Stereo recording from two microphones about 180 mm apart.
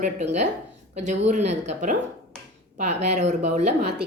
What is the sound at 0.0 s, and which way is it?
Speech, 40° right (ahead or behind).